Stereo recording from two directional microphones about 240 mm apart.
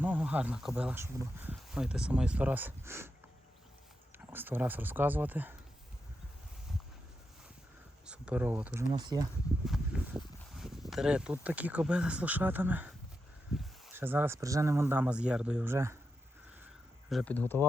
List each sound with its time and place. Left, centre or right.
0.0 s speech: centre
4.3 s speech: centre
8.0 s speech: centre
9.6 s speech: centre
17.1 s speech: centre